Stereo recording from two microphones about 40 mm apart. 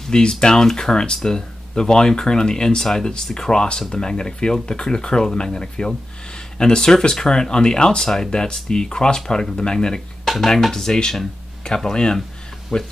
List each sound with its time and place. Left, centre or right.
0.1 s speech: left
10.2 s stir: centre
10.5 s speech: centre
12.7 s speech: centre